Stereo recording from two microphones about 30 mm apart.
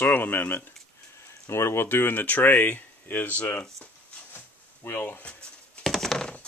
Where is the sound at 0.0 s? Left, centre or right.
Left.